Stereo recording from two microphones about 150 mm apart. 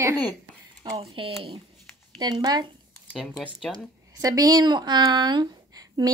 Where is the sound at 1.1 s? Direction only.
35° right (ahead or behind).